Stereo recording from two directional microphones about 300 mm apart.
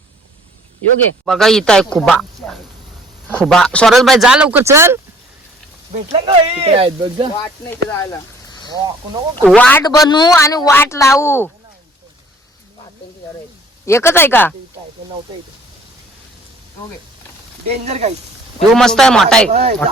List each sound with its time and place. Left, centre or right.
1.2 s speech: centre
5.9 s speech: centre
8.8 s speech: centre
9.4 s a man's voice: centre
13.8 s a man's voice: centre
17.7 s speech: right
18.7 s speech: centre
19.5 s speech: right